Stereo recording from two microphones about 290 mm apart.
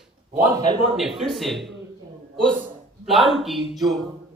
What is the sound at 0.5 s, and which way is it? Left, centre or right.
Speech, centre.